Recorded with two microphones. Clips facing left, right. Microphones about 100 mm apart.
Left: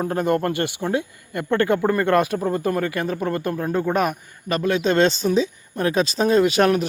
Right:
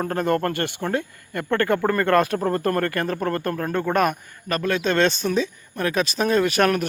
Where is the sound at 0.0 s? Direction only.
15° left (ahead or behind).